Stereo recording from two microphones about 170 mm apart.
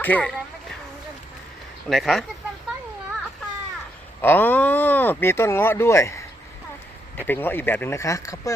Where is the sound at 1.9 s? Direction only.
Centre (ahead or behind).